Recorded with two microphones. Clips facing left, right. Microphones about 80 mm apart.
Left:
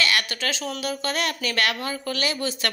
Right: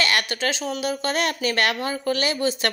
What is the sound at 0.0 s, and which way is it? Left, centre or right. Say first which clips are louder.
Speech: right 2 dB; right.